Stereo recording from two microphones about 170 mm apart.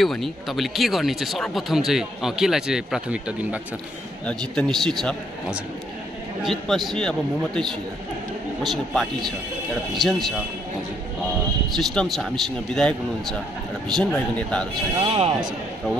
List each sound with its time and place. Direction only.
0.0 s speech: centre (ahead or behind)
4.3 s speech: 5° left (ahead or behind)
6.4 s speech: centre (ahead or behind)
8.6 s speech: centre (ahead or behind)
11.7 s speech: 5° left (ahead or behind)
15.0 s speech: 35° right (ahead or behind)